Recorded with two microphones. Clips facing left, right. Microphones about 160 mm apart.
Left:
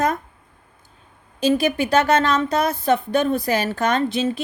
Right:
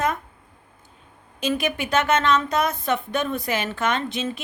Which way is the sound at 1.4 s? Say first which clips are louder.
Left 6 dB; 35° left (ahead or behind).